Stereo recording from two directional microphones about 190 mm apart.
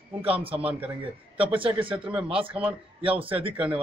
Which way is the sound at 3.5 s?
5° right (ahead or behind).